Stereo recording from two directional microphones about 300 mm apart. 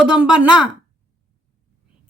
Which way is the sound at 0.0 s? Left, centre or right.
Centre.